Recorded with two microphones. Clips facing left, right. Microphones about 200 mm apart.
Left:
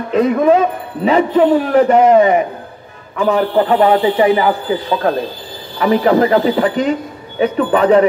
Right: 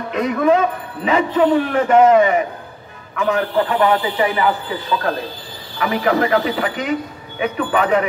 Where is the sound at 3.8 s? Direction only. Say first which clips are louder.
Left 6 dB; 35° left (ahead or behind).